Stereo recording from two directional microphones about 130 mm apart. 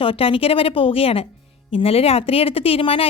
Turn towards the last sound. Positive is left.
turn(degrees=45)  # may be behind; listen again after turning